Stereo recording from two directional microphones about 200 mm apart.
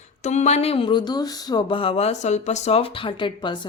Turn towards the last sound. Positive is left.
turn(degrees=25)  # may be behind; listen again after turning